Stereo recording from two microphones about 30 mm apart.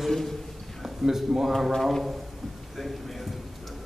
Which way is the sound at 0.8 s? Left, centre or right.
Centre.